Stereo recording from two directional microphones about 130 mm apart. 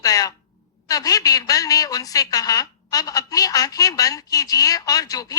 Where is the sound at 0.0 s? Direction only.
25° left (ahead or behind).